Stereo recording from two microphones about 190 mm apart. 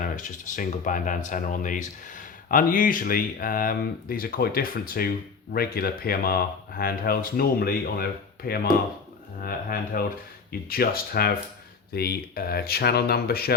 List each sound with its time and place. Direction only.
0.0 s speech: 40° left (ahead or behind)